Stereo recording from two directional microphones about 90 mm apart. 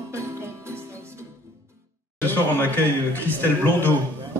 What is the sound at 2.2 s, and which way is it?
Speech, 20° left (ahead or behind).